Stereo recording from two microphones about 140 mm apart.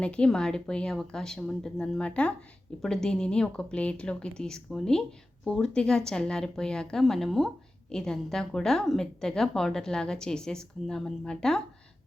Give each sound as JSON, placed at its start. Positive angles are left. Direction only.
{"t": 0.0, "sound": "a woman's voice", "side_deg": 10}